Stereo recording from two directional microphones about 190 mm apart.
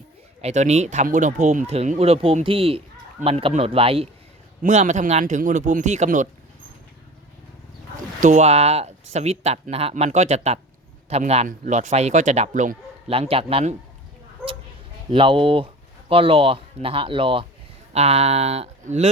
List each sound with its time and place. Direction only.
0.4 s speech: 35° right (ahead or behind)
8.2 s speech: 35° right (ahead or behind)
15.1 s speech: 25° right (ahead or behind)